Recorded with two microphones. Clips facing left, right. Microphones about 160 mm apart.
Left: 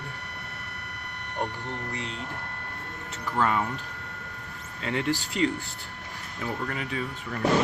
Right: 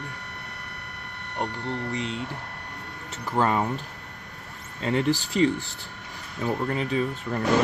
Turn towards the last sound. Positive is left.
turn(degrees=-30)  # may be behind; listen again after turning